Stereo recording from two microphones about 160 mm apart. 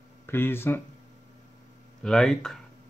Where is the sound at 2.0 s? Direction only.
5° left (ahead or behind).